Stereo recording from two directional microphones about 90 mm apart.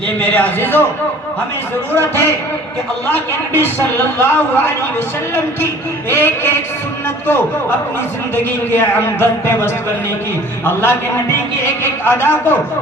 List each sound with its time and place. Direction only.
0.2 s speech: 20° left (ahead or behind)
2.0 s speech: 25° left (ahead or behind)
3.5 s speech: 25° left (ahead or behind)
6.1 s speech: 25° left (ahead or behind)
8.7 s speech: 25° left (ahead or behind)